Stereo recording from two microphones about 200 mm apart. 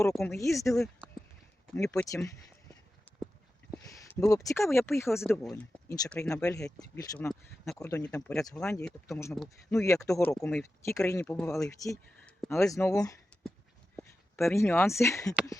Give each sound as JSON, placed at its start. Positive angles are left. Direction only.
{"t": 0.1, "sound": "speech", "side_deg": 0}
{"t": 0.3, "sound": "speech", "side_deg": 15}
{"t": 1.7, "sound": "speech", "side_deg": 15}
{"t": 3.8, "sound": "a sound", "side_deg": 15}
{"t": 4.3, "sound": "speech", "side_deg": 15}
{"t": 9.0, "sound": "speech", "side_deg": 15}
{"t": 9.3, "sound": "speech", "side_deg": 0}
{"t": 9.7, "sound": "speech", "side_deg": 15}
{"t": 10.3, "sound": "speech", "side_deg": 5}
{"t": 12.5, "sound": "speech", "side_deg": 15}